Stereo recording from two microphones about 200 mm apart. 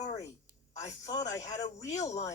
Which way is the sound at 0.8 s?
15° left (ahead or behind).